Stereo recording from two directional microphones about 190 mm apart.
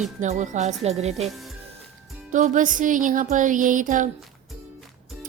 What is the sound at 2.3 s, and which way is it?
Speech, 40° right (ahead or behind).